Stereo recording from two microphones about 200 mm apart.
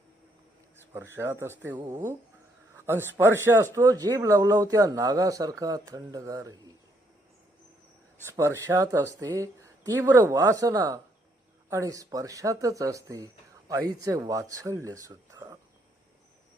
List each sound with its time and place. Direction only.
0.9 s speech: 10° right (ahead or behind)
8.2 s speech: 15° right (ahead or behind)